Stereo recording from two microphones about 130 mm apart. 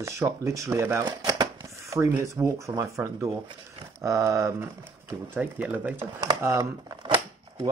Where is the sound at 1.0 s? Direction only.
30° right (ahead or behind); by 5.9 s 10° right (ahead or behind).